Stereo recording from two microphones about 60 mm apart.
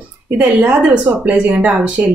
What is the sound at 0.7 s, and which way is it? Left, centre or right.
Speech, right.